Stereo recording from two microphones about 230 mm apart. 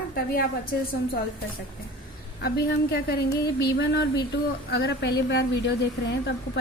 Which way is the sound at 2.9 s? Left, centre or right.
Left.